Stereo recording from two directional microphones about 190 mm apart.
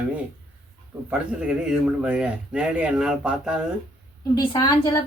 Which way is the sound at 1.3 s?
5° right (ahead or behind).